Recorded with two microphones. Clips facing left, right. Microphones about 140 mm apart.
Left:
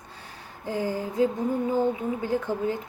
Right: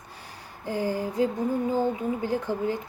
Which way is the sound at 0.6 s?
20° left (ahead or behind).